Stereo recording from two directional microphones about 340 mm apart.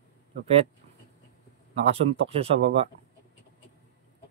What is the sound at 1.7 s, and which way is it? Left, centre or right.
Speech, centre.